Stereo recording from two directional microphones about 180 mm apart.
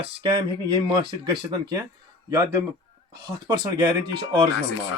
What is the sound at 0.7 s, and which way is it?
Speech, 25° right (ahead or behind).